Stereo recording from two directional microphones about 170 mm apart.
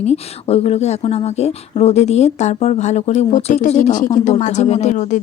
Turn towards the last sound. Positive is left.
turn(degrees=45)  # may be behind; listen again after turning